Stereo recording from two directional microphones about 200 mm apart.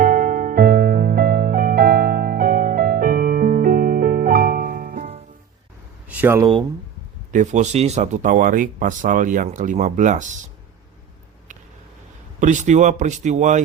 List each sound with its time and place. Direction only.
0.0 s music: 45° right (ahead or behind)
6.1 s a sound: 10° right (ahead or behind)
7.3 s speech: 40° right (ahead or behind)
12.4 s speech: 40° right (ahead or behind)